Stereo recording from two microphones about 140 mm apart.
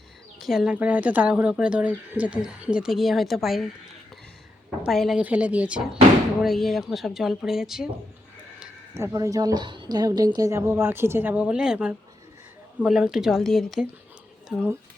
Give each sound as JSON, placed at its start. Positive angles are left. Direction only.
{"t": 0.3, "sound": "a woman's voice", "side_deg": -5}
{"t": 4.8, "sound": "a woman's voice", "side_deg": 0}
{"t": 9.0, "sound": "a woman's voice", "side_deg": -20}